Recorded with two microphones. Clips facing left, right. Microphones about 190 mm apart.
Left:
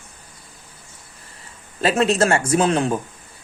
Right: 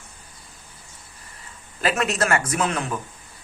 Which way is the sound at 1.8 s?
30° left (ahead or behind).